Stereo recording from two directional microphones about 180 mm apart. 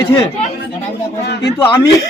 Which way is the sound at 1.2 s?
65° left (ahead or behind).